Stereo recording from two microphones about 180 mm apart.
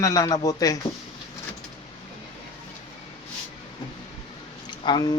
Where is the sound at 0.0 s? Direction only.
20° left (ahead or behind).